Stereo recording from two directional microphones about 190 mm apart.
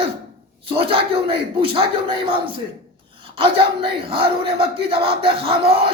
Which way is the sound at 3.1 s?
30° right (ahead or behind).